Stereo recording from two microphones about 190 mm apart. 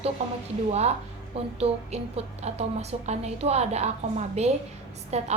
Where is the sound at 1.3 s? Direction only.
30° right (ahead or behind).